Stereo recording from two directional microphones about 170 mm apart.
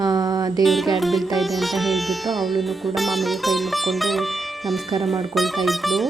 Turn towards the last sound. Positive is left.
turn(degrees=0)  # may be behind; listen again after turning